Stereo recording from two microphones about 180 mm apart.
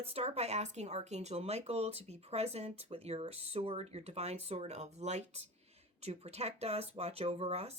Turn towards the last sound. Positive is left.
turn(degrees=-35)  # may be behind; listen again after turning